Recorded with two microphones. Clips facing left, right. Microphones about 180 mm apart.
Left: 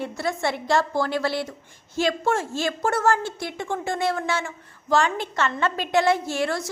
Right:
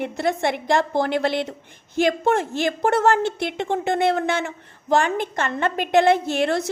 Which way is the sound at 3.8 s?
60° right (ahead or behind).